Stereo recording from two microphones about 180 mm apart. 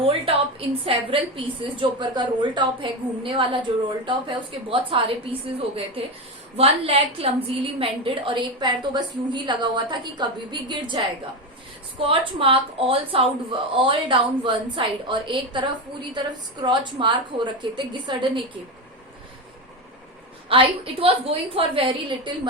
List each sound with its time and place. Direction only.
0.0 s a woman's voice: 30° right (ahead or behind)
20.5 s a woman's voice: 30° right (ahead or behind)